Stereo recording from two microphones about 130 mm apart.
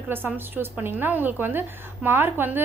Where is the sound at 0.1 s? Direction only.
15° right (ahead or behind).